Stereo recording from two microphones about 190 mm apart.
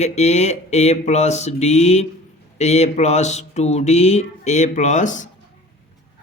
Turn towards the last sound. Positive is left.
turn(degrees=40)  # may be behind; listen again after turning